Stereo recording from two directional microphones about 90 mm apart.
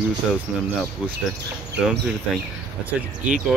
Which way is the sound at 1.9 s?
10° right (ahead or behind).